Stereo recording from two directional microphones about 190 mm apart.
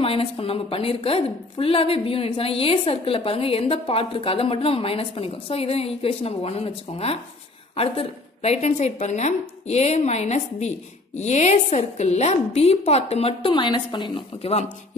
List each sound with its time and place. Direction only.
0.0 s a woman's voice: 30° left (ahead or behind)